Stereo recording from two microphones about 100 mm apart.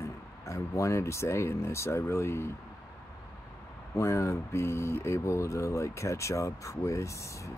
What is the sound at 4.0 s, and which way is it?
Speech, 30° left (ahead or behind).